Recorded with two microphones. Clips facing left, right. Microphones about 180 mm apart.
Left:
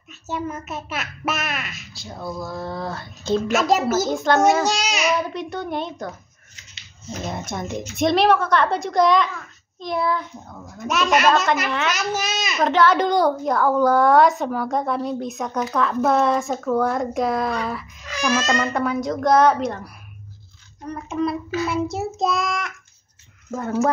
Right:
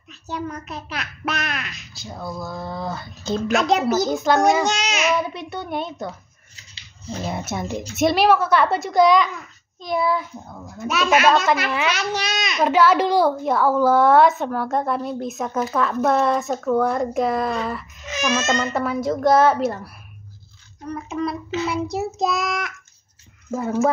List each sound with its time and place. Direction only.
0.1 s a child's voice: 5° left (ahead or behind)
7.2 s a child's voice: 5° right (ahead or behind)
17.6 s a sound: centre (ahead or behind)
18.0 s a sound: 20° right (ahead or behind)
18.6 s a child's voice: 5° right (ahead or behind)
20.9 s a child's voice: centre (ahead or behind)